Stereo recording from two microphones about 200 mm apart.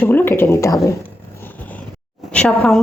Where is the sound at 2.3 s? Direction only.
5° left (ahead or behind).